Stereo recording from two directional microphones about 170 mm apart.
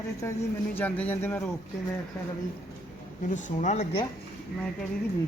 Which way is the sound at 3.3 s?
50° left (ahead or behind).